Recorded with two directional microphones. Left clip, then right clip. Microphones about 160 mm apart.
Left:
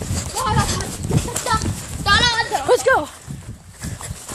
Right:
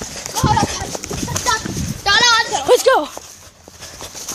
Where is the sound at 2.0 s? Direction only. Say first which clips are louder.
Right 2 dB; 30° right (ahead or behind).